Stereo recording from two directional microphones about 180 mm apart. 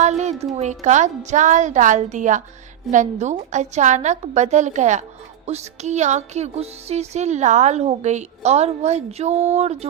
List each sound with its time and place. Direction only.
0.0 s speech: 40° right (ahead or behind)
2.9 s music: 40° right (ahead or behind)